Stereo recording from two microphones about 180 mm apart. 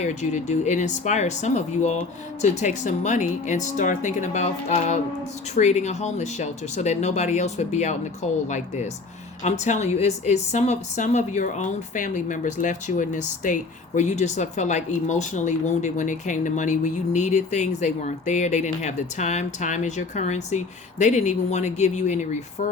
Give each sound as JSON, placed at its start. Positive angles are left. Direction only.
{"t": 0.0, "sound": "speech", "side_deg": 40}